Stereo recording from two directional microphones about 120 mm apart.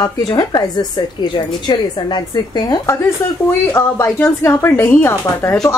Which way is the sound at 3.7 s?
20° left (ahead or behind).